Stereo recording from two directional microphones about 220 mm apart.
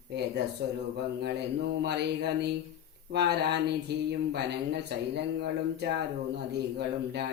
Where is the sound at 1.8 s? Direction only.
50° right (ahead or behind).